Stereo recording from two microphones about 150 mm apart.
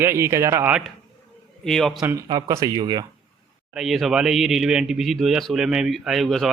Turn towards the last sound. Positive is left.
turn(degrees=0)  # may be behind; listen again after turning